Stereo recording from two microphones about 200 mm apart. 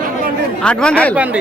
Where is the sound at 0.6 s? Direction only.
5° left (ahead or behind).